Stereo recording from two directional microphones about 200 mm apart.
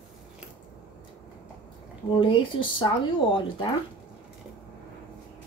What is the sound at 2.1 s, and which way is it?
Speech, 25° left (ahead or behind).